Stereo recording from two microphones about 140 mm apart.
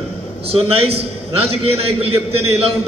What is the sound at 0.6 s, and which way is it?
A man's voice, 45° right (ahead or behind).